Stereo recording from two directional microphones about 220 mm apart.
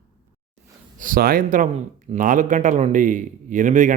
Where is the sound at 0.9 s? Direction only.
40° right (ahead or behind).